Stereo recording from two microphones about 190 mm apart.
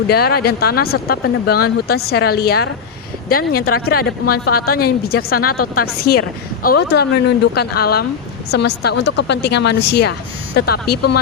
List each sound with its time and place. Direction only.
0.1 s a woman's voice: 55° left (ahead or behind)